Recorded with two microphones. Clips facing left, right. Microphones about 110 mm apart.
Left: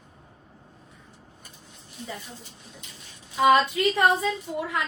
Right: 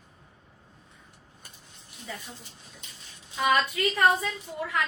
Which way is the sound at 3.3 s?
25° left (ahead or behind).